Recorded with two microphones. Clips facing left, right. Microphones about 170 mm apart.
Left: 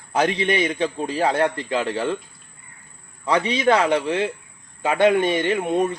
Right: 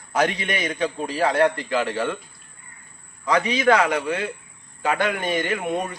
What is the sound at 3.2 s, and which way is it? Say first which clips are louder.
A man's voice: even; 30° left (ahead or behind).